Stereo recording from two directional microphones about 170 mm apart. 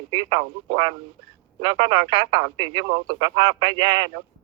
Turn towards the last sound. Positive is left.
turn(degrees=-25)  # may be behind; listen again after turning